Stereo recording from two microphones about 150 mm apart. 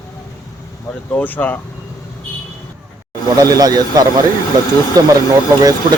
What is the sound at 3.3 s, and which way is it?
Speech, 25° right (ahead or behind).